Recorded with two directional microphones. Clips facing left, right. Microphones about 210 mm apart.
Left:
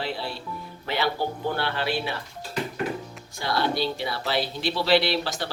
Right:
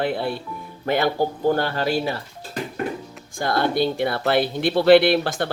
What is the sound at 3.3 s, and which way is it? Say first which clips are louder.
Speech: right 5 dB; 50° right (ahead or behind).